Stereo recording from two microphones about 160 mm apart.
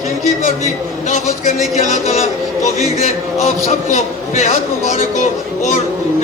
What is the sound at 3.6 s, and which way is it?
A man's voice, 45° left (ahead or behind).